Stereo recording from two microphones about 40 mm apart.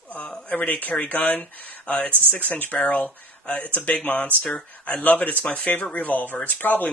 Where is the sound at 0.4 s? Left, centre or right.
Left.